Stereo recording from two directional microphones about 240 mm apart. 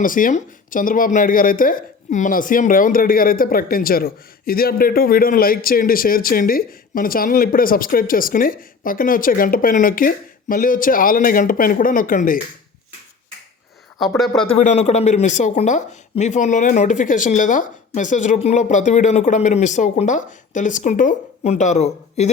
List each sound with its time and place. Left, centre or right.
0.0 s speech: left
14.0 s speech: centre
14.5 s speech: left